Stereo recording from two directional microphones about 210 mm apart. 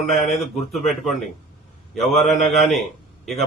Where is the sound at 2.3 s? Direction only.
35° left (ahead or behind).